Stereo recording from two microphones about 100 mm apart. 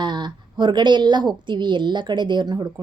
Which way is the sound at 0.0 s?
50° right (ahead or behind).